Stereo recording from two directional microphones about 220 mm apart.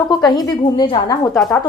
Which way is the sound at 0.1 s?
20° left (ahead or behind).